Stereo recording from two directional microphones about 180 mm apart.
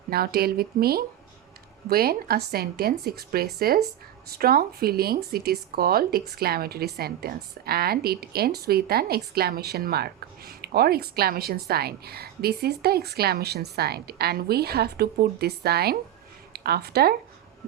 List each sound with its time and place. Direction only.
0.1 s a woman's voice: 60° right (ahead or behind)